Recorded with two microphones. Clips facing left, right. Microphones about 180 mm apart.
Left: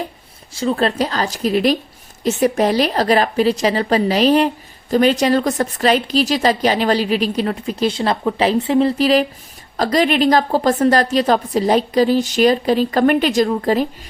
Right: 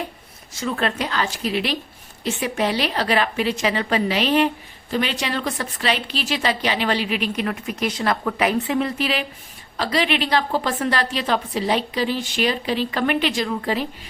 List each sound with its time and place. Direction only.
0.5 s a woman's voice: 30° left (ahead or behind)